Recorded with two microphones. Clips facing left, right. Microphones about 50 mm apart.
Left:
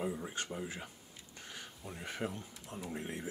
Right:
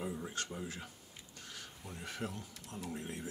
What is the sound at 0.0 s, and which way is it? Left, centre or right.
Speech, centre.